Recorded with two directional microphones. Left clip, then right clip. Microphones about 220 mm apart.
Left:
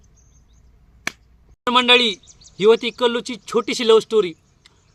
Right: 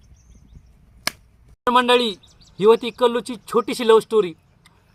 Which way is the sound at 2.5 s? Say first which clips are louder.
Even; 20° left (ahead or behind).